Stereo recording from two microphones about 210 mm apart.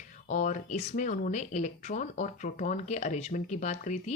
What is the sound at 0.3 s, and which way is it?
Speech, 35° left (ahead or behind).